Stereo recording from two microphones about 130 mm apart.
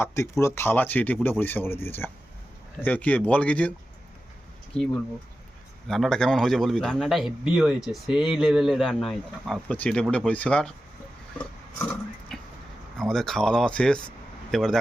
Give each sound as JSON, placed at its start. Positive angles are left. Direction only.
{"t": 0.0, "sound": "speech", "side_deg": 20}
{"t": 4.7, "sound": "speech", "side_deg": 5}
{"t": 12.3, "sound": "vehicle", "side_deg": 0}
{"t": 13.0, "sound": "speech", "side_deg": 5}